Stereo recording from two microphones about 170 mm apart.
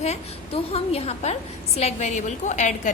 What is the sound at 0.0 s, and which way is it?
A woman's voice, 35° left (ahead or behind).